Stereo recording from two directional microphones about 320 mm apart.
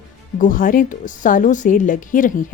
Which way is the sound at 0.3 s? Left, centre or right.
Left.